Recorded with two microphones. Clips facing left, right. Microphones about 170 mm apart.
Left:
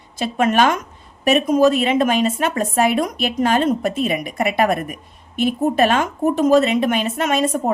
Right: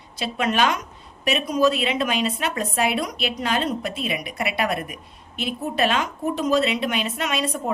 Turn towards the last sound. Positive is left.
turn(degrees=45)  # may be behind; listen again after turning